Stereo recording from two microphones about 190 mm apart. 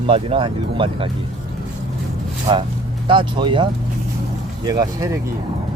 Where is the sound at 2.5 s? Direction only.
25° right (ahead or behind).